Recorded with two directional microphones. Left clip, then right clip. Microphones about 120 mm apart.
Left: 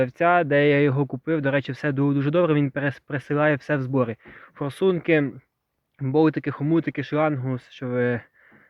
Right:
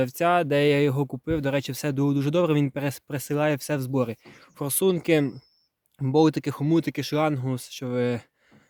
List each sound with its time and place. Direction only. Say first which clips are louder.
0.0 s speech: left 3 dB; 30° right (ahead or behind)
6.0 s speech: left 1 dB; 55° right (ahead or behind); by 8.3 s 30° right (ahead or behind)